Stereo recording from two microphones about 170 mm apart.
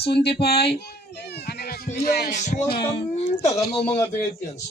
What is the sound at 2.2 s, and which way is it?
Music, 45° left (ahead or behind).